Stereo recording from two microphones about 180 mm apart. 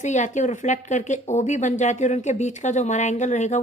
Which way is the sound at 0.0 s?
40° left (ahead or behind).